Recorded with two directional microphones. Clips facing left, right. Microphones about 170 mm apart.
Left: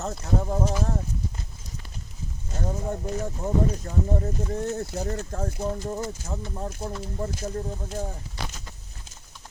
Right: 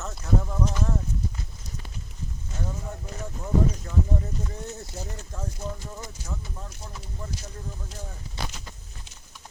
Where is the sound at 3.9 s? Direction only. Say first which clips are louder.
Even; 45° left (ahead or behind).